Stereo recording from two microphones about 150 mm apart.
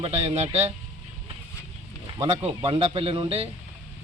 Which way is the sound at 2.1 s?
30° right (ahead or behind).